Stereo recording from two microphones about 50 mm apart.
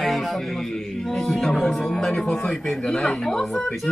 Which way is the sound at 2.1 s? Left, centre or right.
Left.